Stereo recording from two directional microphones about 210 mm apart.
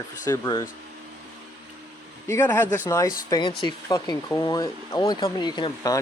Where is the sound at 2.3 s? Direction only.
10° left (ahead or behind).